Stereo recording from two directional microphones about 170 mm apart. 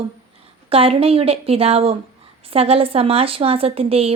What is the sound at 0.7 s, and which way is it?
Speech, 35° right (ahead or behind).